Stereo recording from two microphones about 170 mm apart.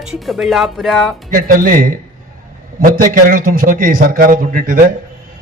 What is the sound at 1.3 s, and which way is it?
A man's voice, 55° right (ahead or behind).